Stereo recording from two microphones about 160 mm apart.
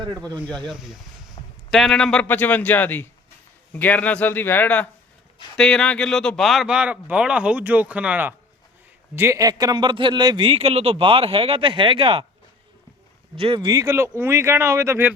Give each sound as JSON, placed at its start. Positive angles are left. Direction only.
{"t": 0.6, "sound": "speech", "side_deg": 0}
{"t": 1.4, "sound": "a sound", "side_deg": 30}
{"t": 1.7, "sound": "a man's voice", "side_deg": 5}
{"t": 13.3, "sound": "speech", "side_deg": -35}